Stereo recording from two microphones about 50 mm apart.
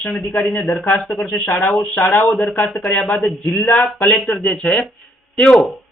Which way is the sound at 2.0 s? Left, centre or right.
Left.